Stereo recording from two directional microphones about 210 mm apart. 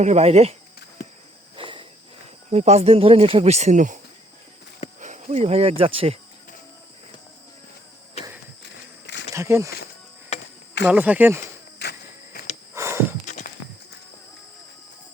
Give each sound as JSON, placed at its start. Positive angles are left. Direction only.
{"t": 0.0, "sound": "speech", "side_deg": -30}
{"t": 1.5, "sound": "cricket", "side_deg": -25}
{"t": 2.5, "sound": "speech", "side_deg": -30}
{"t": 4.9, "sound": "speech", "side_deg": -35}
{"t": 8.6, "sound": "walk", "side_deg": 55}
{"t": 9.3, "sound": "speech", "side_deg": -15}
{"t": 10.3, "sound": "cricket", "side_deg": 30}
{"t": 10.8, "sound": "speech", "side_deg": -5}
{"t": 11.8, "sound": "insect", "side_deg": 50}
{"t": 12.7, "sound": "a sound", "side_deg": -15}
{"t": 13.2, "sound": "walk", "side_deg": 35}